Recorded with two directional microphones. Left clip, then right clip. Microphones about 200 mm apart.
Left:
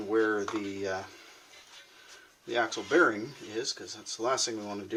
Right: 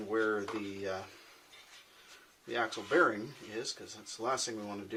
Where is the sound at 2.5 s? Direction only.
20° left (ahead or behind).